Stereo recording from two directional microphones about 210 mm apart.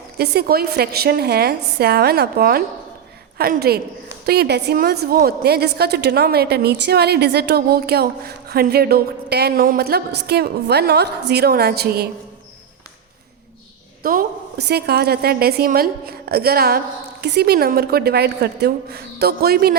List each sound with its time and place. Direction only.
0.2 s a woman's voice: 45° right (ahead or behind)
14.0 s a woman's voice: 45° right (ahead or behind)